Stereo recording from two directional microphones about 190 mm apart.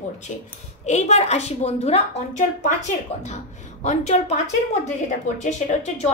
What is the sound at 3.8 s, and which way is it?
Speech, 35° left (ahead or behind).